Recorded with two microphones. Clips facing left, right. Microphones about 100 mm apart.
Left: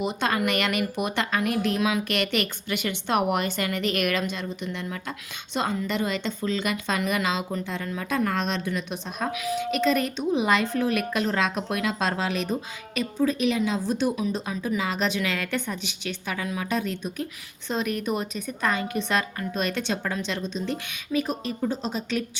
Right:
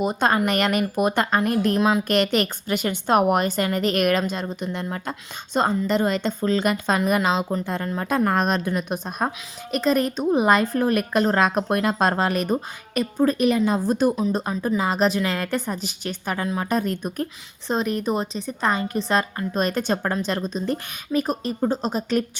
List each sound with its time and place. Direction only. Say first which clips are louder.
0.0 s speech: right 5 dB; 45° right (ahead or behind)
17.7 s speech: right 4 dB; 35° right (ahead or behind)